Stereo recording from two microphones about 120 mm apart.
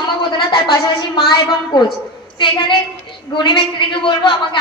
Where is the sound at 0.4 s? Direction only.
40° left (ahead or behind).